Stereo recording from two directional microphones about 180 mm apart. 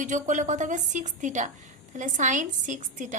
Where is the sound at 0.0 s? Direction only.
45° right (ahead or behind).